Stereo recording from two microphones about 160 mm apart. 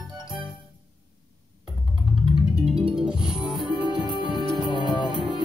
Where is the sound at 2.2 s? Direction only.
5° right (ahead or behind).